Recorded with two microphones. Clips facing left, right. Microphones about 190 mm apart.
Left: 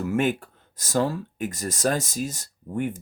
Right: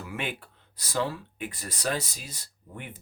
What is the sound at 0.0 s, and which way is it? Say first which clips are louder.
Speech: left 11 dB; 45° left (ahead or behind).